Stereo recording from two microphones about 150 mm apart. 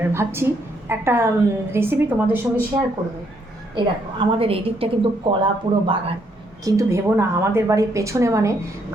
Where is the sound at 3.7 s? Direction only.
35° right (ahead or behind).